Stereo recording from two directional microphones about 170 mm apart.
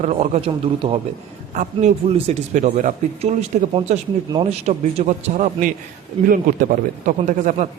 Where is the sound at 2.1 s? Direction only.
40° right (ahead or behind).